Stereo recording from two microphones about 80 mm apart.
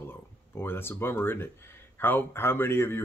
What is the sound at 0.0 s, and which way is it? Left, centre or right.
Speech, left.